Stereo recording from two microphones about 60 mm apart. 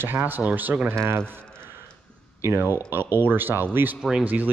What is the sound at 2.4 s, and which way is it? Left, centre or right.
Speech, right.